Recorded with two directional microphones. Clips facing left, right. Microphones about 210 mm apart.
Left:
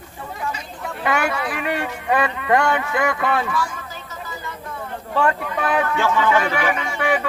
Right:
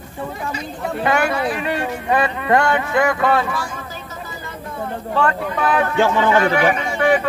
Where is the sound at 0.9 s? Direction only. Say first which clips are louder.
Right 3 dB; 35° right (ahead or behind).